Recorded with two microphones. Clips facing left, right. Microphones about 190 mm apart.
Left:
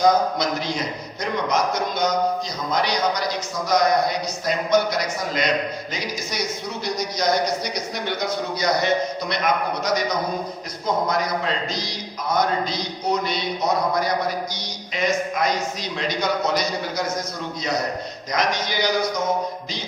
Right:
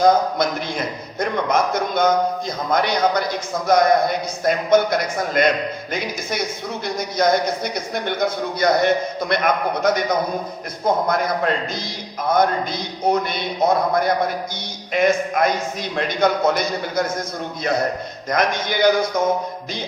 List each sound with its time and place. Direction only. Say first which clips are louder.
0.0 s a man's voice: right 2 dB; 55° right (ahead or behind)
18.3 s a man's voice: right 3 dB; 55° right (ahead or behind)